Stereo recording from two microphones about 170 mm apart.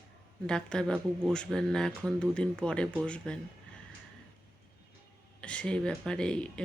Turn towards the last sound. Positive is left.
turn(degrees=5)  # may be behind; listen again after turning